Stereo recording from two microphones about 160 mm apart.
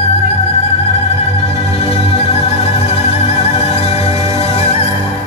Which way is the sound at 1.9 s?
40° left (ahead or behind).